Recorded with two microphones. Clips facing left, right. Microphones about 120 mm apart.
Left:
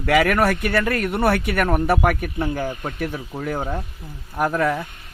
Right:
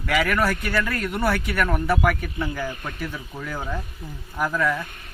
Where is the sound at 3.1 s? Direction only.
35° left (ahead or behind).